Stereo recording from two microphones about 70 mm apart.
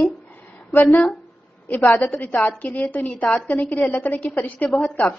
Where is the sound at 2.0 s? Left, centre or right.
Left.